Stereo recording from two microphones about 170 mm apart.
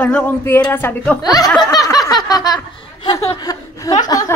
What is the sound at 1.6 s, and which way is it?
Snicker, 20° left (ahead or behind).